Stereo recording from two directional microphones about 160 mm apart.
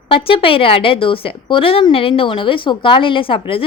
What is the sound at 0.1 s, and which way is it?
Speech, 35° left (ahead or behind).